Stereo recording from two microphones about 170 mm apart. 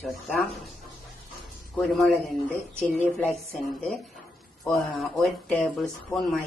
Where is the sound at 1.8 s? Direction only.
Centre (ahead or behind).